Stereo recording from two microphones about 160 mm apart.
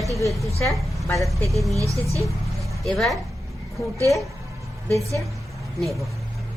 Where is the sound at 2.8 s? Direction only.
Centre (ahead or behind).